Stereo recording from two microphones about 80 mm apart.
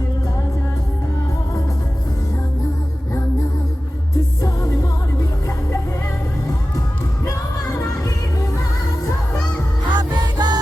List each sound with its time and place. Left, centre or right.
4.4 s music: left
7.3 s music: left
9.9 s music: right